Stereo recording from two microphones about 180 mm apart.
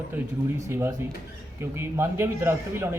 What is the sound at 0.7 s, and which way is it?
A man's voice, 15° right (ahead or behind).